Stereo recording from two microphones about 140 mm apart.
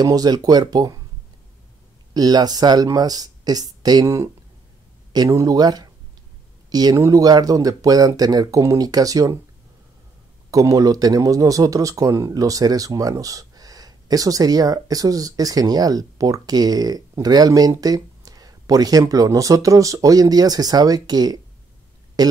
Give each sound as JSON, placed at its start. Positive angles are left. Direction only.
{"t": 0.0, "sound": "speech", "side_deg": -30}
{"t": 2.1, "sound": "speech", "side_deg": -30}
{"t": 10.5, "sound": "speech", "side_deg": -25}